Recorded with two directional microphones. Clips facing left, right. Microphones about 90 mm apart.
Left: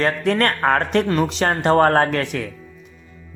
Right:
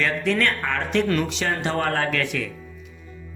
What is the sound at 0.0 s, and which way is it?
A man's voice, 45° left (ahead or behind).